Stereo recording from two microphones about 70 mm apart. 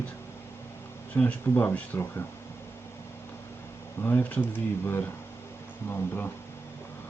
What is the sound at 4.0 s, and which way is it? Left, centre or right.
Speech, left.